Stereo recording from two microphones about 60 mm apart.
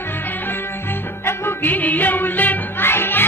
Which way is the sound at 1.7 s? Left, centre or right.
Left.